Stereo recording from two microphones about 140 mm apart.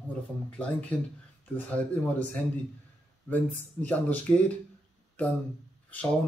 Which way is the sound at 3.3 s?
10° left (ahead or behind).